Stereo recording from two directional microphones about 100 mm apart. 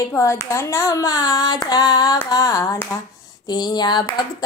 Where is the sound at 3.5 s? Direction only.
45° left (ahead or behind).